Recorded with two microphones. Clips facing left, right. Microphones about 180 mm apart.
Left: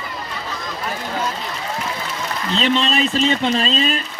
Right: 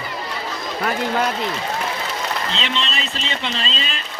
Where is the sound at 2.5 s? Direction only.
45° left (ahead or behind).